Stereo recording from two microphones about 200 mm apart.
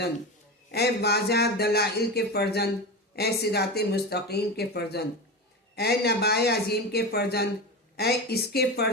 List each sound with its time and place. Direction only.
0.7 s speech: 55° left (ahead or behind)